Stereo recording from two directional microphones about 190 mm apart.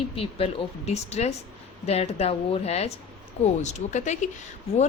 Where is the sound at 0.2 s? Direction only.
30° left (ahead or behind).